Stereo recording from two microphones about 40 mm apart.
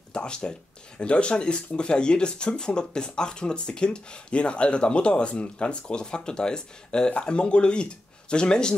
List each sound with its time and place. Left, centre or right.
0.1 s speech: left